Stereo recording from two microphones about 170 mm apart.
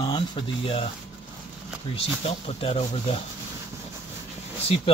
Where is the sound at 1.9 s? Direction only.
35° left (ahead or behind).